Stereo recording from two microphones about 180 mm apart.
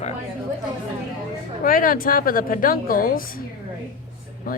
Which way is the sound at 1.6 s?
50° left (ahead or behind).